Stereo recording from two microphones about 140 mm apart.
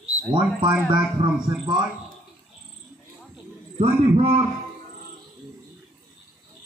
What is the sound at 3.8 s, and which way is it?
Speech, 45° right (ahead or behind).